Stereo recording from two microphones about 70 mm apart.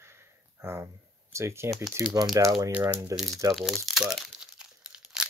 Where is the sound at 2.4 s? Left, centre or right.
Right.